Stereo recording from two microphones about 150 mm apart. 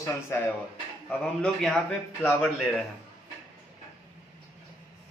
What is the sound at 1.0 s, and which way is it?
A man's voice, 5° left (ahead or behind).